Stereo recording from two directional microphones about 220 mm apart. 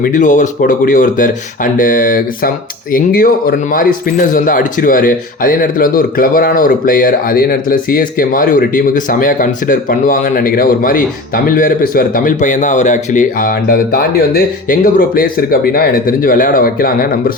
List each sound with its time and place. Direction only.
0.0 s speech: 35° left (ahead or behind)